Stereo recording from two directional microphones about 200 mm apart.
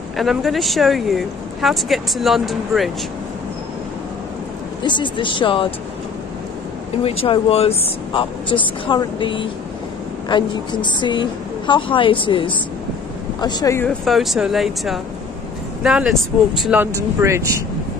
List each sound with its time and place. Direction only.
0.2 s speech: centre (ahead or behind)
4.8 s a woman's voice: 25° left (ahead or behind)
7.0 s a woman's voice: 30° left (ahead or behind)
13.8 s speech: centre (ahead or behind)